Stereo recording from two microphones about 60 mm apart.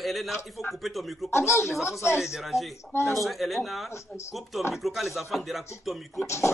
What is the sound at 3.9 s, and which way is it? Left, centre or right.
Speech, left.